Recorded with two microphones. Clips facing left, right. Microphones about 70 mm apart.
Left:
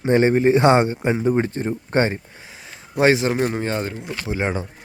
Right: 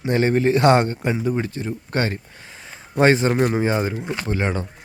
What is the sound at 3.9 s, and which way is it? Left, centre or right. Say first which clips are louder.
Speech: right 4 dB; right.